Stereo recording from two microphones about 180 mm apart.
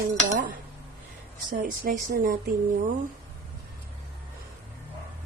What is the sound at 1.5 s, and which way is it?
Speech, 45° right (ahead or behind).